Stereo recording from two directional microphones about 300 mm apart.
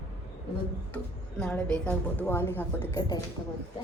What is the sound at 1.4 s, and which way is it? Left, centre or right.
A woman's voice, centre.